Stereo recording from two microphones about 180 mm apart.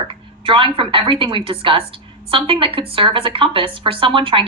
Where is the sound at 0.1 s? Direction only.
30° right (ahead or behind).